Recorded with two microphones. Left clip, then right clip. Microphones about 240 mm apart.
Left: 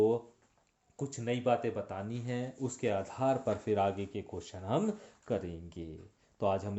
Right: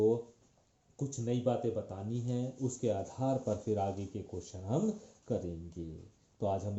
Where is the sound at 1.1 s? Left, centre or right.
Left.